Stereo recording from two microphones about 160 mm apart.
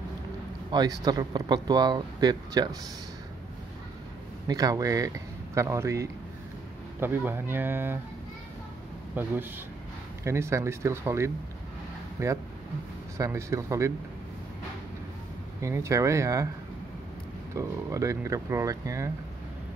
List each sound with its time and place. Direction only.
0.7 s speech: 25° right (ahead or behind)
4.5 s speech: 25° right (ahead or behind)
9.1 s speech: 10° right (ahead or behind)
15.6 s speech: 20° right (ahead or behind)
17.6 s speech: 20° right (ahead or behind)